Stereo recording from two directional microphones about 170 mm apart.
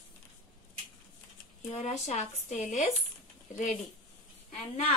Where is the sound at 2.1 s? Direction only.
40° left (ahead or behind).